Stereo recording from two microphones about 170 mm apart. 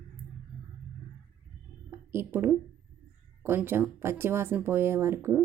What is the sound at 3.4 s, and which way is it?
Speech, 15° right (ahead or behind).